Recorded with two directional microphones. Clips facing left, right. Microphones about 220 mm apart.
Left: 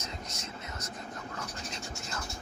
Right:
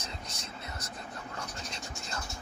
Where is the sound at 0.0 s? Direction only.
30° right (ahead or behind).